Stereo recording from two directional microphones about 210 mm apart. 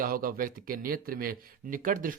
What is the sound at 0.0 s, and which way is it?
Speech, 45° right (ahead or behind).